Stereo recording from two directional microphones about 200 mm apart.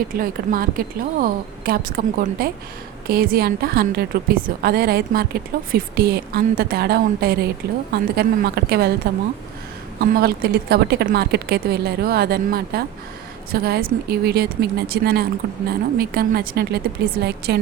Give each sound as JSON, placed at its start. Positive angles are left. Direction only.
{"t": 0.1, "sound": "a woman's voice", "side_deg": -45}
{"t": 10.0, "sound": "a woman's voice", "side_deg": -50}